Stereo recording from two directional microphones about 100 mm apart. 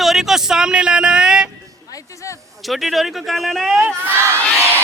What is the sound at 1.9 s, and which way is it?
Speech, 30° left (ahead or behind).